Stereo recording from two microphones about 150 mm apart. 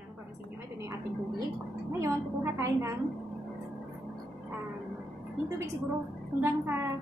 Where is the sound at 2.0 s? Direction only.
20° right (ahead or behind).